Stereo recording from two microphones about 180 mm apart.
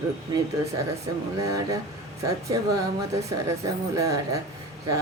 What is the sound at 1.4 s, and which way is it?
A woman's voice, 20° right (ahead or behind).